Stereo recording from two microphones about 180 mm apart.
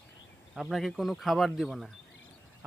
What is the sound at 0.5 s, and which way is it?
Speech, centre (ahead or behind).